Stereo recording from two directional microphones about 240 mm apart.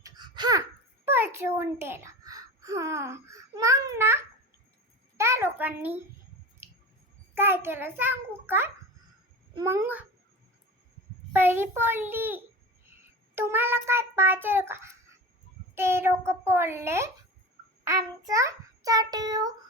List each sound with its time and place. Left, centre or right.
0.0 s babbling: centre
1.0 s a sound: centre
7.3 s a child's voice: centre
11.3 s a child's voice: centre